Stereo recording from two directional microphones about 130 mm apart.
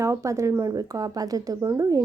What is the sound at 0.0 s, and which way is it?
Speech, 25° right (ahead or behind).